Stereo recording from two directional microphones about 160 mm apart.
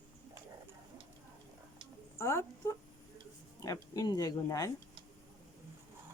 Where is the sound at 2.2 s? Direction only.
15° left (ahead or behind).